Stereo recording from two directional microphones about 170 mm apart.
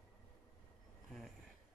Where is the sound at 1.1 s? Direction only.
Centre (ahead or behind).